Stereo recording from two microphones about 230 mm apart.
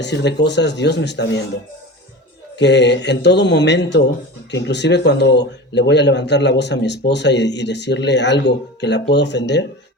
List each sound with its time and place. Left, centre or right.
0.0 s a man's voice: left
2.6 s a man's voice: left